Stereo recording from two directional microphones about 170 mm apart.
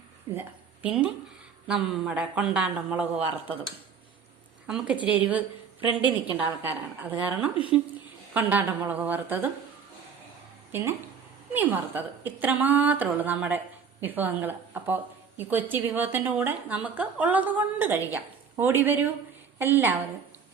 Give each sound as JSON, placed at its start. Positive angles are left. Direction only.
{"t": 0.3, "sound": "a woman's voice", "side_deg": -10}
{"t": 4.6, "sound": "a woman's voice", "side_deg": -5}
{"t": 6.0, "sound": "a woman's voice", "side_deg": 25}
{"t": 6.3, "sound": "a woman's voice", "side_deg": -10}
{"t": 10.7, "sound": "a woman's voice", "side_deg": -15}